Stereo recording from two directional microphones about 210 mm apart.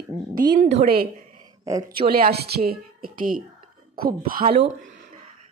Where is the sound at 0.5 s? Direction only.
30° right (ahead or behind).